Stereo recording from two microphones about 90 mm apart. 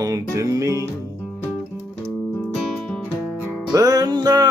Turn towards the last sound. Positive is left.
turn(degrees=-50)  # may be behind; listen again after turning